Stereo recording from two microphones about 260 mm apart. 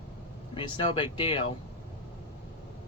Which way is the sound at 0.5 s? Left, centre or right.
Centre.